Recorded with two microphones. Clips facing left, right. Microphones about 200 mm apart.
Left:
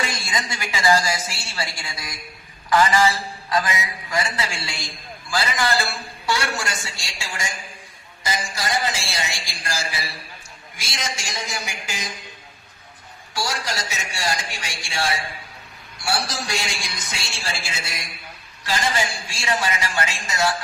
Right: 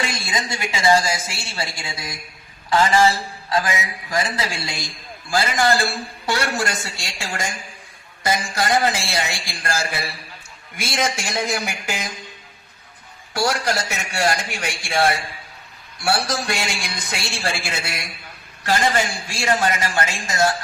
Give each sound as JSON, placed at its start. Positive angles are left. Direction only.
{"t": 0.0, "sound": "a woman's voice", "side_deg": -25}
{"t": 6.2, "sound": "a man's voice", "side_deg": -55}
{"t": 13.3, "sound": "a man's voice", "side_deg": -60}